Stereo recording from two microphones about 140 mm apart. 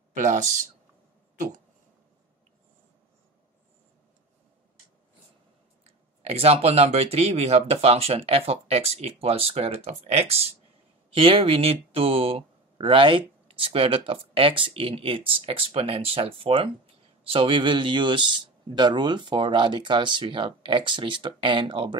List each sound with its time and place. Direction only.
0.1 s speech: 60° right (ahead or behind)
5.9 s speech: 45° right (ahead or behind)